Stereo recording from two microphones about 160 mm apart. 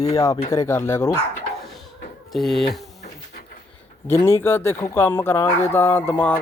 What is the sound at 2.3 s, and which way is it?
Speech, centre (ahead or behind).